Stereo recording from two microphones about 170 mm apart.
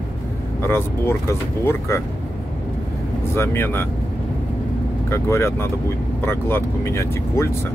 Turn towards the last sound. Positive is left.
turn(degrees=15)  # may be behind; listen again after turning